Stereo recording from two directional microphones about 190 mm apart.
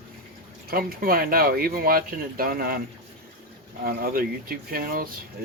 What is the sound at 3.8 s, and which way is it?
Speech, 50° right (ahead or behind).